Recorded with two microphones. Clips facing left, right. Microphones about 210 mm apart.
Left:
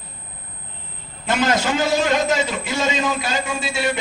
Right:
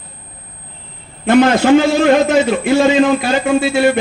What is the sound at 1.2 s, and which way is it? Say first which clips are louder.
A man's voice: right 10 dB; 60° right (ahead or behind).